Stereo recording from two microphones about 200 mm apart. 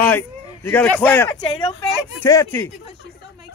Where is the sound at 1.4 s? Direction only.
30° left (ahead or behind).